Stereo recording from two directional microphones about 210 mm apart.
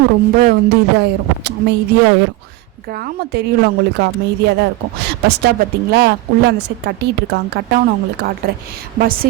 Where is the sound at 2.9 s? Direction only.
45° right (ahead or behind).